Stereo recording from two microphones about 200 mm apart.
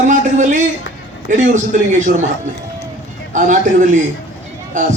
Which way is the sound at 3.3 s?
40° right (ahead or behind).